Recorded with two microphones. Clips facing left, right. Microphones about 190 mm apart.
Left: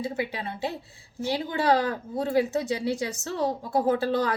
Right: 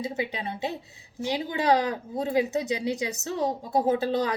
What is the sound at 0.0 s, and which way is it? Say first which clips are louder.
Speech: even; 20° right (ahead or behind).